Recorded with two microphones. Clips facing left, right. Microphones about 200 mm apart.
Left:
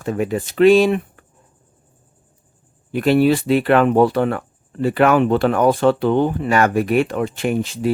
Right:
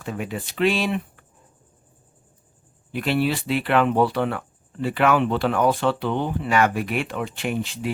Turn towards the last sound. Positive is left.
turn(degrees=40)  # may be behind; listen again after turning